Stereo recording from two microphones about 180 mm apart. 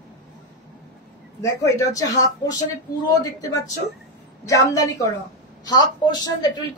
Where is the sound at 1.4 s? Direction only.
15° left (ahead or behind).